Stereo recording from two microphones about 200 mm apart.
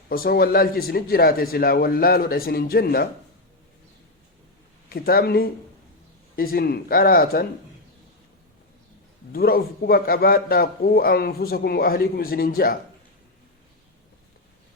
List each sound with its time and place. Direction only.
0.1 s a man's voice: 50° left (ahead or behind)
4.9 s a man's voice: 50° left (ahead or behind)
9.3 s a man's voice: 50° left (ahead or behind)